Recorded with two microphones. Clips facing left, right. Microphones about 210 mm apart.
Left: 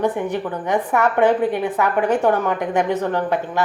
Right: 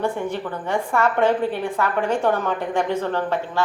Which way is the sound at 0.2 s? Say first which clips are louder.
Left 3 dB; 15° left (ahead or behind).